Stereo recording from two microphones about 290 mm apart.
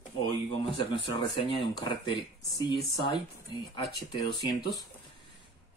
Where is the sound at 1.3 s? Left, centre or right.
Centre.